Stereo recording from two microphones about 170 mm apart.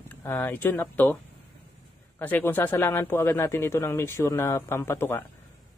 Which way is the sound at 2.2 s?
10° left (ahead or behind).